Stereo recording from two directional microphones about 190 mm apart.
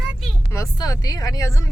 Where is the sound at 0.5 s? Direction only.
15° left (ahead or behind).